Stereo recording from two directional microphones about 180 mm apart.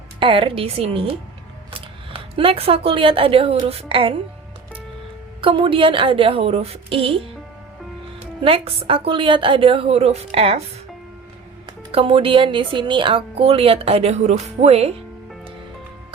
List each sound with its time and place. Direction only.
0.2 s speech: 30° right (ahead or behind)
2.3 s speech: 30° right (ahead or behind)
5.4 s a woman's voice: 30° right (ahead or behind)
11.9 s speech: 30° right (ahead or behind)